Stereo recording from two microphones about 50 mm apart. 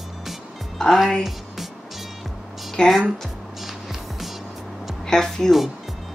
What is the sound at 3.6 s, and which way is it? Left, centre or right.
Music, centre.